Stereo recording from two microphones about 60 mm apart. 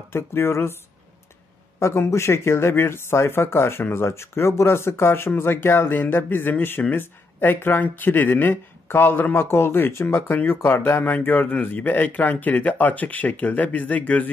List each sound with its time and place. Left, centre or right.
0.1 s speech: left
1.8 s speech: left